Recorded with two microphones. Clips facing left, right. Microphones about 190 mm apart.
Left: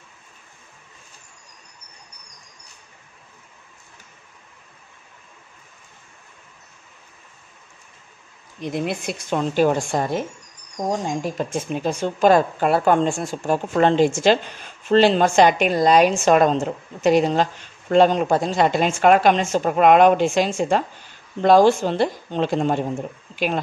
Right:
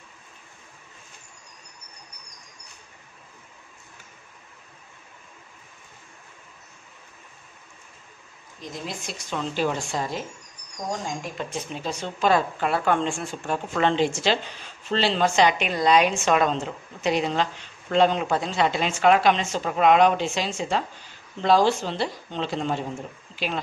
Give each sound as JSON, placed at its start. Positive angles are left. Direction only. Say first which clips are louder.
{"t": 8.5, "sound": "speech", "louder": "left 10 dB", "side_deg": 65}
{"t": 11.2, "sound": "speech", "louder": "left 7 dB", "side_deg": 45}